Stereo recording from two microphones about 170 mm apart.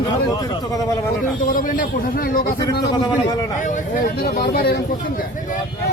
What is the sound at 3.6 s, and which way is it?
Speech, 60° left (ahead or behind).